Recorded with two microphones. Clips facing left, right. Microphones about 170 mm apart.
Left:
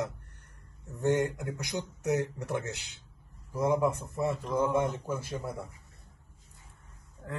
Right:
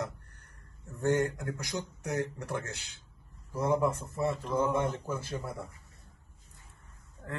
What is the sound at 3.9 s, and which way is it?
Speech, 15° left (ahead or behind).